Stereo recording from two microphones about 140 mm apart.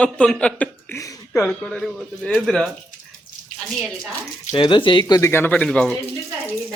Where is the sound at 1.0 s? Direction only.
25° left (ahead or behind).